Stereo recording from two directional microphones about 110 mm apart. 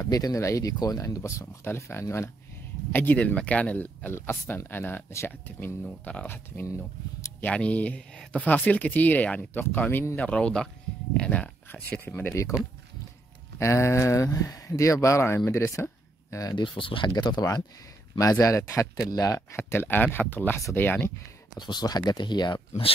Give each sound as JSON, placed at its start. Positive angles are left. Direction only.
{"t": 0.0, "sound": "speech", "side_deg": 35}
{"t": 7.4, "sound": "speech", "side_deg": 10}
{"t": 13.6, "sound": "speech", "side_deg": 25}
{"t": 16.5, "sound": "speech", "side_deg": 50}
{"t": 21.5, "sound": "speech", "side_deg": 40}